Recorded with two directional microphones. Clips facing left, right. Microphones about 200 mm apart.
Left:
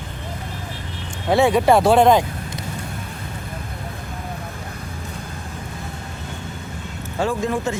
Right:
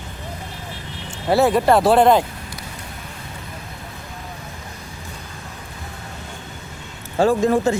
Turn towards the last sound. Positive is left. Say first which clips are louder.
# right 5 dB
turn(degrees=-35)  # may be behind; listen again after turning